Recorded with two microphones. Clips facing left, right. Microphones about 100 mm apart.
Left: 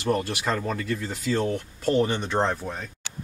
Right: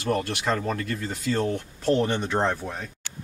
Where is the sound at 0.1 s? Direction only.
5° left (ahead or behind).